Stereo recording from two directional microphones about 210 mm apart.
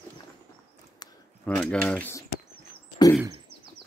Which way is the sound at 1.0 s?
20° left (ahead or behind).